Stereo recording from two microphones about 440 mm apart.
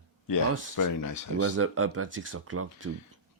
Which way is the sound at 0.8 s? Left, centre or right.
Left.